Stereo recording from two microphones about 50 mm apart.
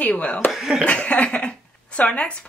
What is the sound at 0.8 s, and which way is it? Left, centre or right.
Speech, left.